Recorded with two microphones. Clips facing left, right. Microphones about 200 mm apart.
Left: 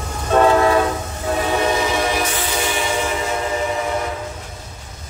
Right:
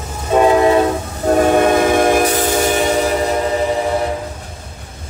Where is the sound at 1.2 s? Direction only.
50° right (ahead or behind).